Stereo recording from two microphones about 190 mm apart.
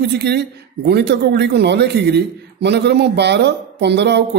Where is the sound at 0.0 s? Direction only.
60° right (ahead or behind).